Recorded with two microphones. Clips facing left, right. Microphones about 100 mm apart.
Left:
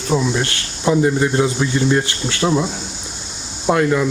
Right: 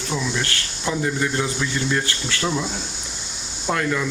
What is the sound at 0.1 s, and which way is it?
Speech, 45° left (ahead or behind).